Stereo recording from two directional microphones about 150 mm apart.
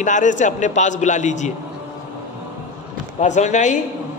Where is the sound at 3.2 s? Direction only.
55° left (ahead or behind).